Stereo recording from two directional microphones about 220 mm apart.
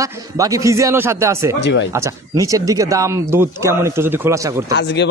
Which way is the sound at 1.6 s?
55° left (ahead or behind).